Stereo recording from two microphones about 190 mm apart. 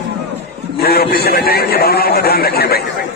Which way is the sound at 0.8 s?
55° left (ahead or behind).